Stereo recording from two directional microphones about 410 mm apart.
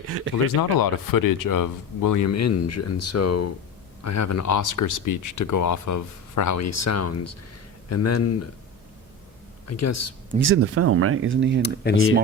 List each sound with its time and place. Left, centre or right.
0.5 s speech: left
9.6 s speech: left
10.3 s speech: right
11.6 s speech: left